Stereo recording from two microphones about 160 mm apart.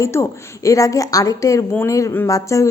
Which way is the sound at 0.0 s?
20° left (ahead or behind).